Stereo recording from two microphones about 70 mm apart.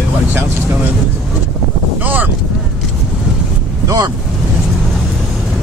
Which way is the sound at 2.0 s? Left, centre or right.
Right.